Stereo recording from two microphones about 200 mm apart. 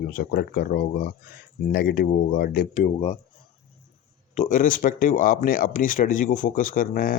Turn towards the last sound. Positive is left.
turn(degrees=45)  # may be behind; listen again after turning